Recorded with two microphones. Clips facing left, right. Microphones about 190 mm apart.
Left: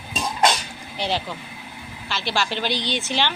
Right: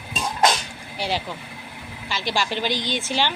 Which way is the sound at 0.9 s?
10° right (ahead or behind).